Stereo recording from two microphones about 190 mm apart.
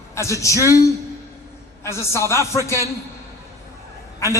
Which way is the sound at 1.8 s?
15° left (ahead or behind).